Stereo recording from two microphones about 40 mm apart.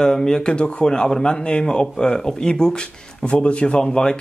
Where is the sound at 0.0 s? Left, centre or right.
Centre.